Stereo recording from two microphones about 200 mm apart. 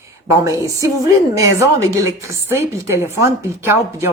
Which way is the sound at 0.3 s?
15° right (ahead or behind).